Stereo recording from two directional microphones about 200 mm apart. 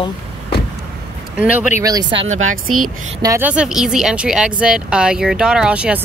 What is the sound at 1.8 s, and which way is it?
Speech, 20° right (ahead or behind).